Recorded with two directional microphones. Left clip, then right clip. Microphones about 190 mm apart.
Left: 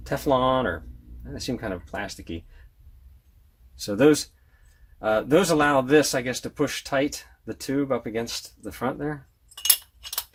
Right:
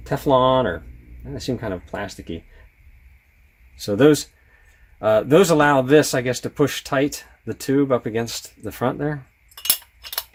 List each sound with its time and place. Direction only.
0.0 s speech: 35° right (ahead or behind)
3.8 s speech: 40° right (ahead or behind)